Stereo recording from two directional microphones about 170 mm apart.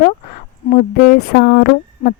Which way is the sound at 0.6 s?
45° left (ahead or behind).